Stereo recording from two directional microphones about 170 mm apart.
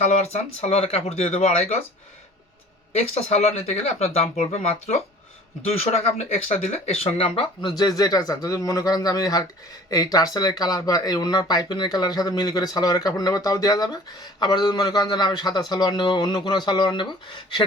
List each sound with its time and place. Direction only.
0.0 s speech: 40° left (ahead or behind)
2.9 s speech: 40° left (ahead or behind)